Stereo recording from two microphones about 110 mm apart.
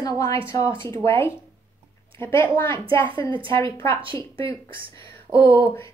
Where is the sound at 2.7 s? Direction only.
50° right (ahead or behind).